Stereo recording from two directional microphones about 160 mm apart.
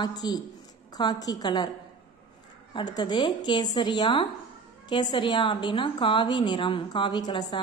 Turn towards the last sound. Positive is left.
turn(degrees=30)  # may be behind; listen again after turning